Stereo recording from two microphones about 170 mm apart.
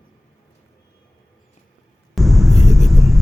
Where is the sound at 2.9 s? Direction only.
Centre (ahead or behind).